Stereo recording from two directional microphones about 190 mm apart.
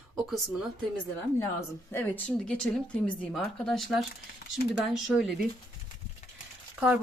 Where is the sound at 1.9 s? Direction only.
10° left (ahead or behind).